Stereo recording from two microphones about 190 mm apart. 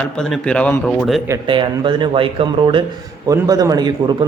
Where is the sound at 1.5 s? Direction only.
25° right (ahead or behind).